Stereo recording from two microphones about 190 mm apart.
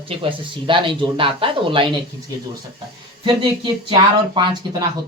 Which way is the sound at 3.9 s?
25° right (ahead or behind).